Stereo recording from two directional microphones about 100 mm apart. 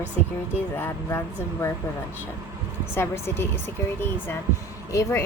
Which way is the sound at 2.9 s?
25° left (ahead or behind).